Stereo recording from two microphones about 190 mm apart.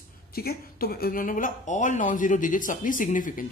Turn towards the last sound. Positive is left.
turn(degrees=45)  # may be behind; listen again after turning